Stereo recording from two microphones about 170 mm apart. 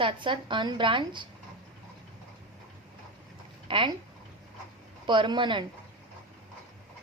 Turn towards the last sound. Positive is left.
turn(degrees=-25)  # may be behind; listen again after turning